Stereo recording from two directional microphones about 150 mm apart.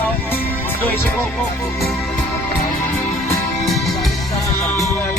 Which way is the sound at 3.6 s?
Centre (ahead or behind).